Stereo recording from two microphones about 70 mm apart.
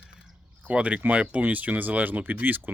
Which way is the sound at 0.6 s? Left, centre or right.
Centre.